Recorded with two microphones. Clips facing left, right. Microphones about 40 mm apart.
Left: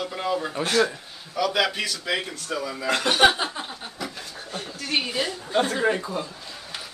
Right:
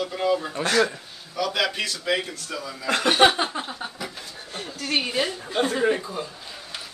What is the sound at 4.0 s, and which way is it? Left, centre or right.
Chuckle, centre.